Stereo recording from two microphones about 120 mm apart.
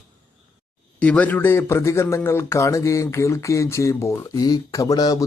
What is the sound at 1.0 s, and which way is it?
Speech, 10° left (ahead or behind).